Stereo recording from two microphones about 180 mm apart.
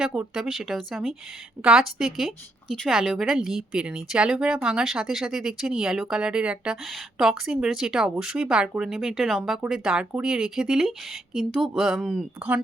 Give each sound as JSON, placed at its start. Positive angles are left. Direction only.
{"t": 0.0, "sound": "a woman's voice", "side_deg": -5}